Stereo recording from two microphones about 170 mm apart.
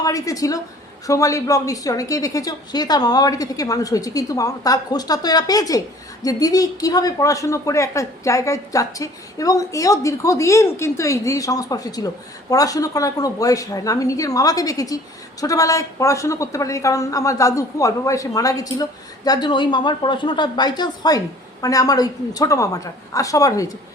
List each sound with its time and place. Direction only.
0.0 s speech: 20° left (ahead or behind)